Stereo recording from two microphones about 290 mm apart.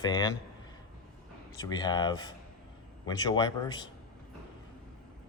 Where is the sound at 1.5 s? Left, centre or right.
Centre.